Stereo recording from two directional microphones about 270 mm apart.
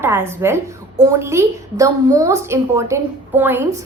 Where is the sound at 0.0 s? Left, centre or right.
Centre.